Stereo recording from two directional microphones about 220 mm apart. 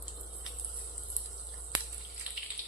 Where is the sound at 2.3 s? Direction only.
5° right (ahead or behind).